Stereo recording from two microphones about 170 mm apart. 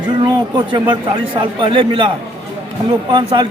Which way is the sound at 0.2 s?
25° right (ahead or behind).